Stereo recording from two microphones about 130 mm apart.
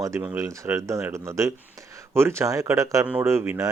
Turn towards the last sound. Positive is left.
turn(degrees=-25)  # may be behind; listen again after turning